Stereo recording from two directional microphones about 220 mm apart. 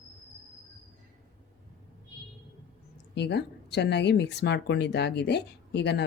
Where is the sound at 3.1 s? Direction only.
50° left (ahead or behind).